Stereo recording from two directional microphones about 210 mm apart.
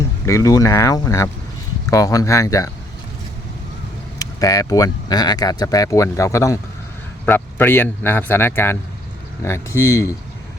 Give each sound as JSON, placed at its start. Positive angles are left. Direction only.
{"t": 0.3, "sound": "speech", "side_deg": 15}
{"t": 4.2, "sound": "speech", "side_deg": 15}